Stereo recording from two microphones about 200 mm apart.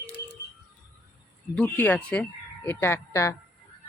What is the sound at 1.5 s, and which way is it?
Speech, 10° left (ahead or behind).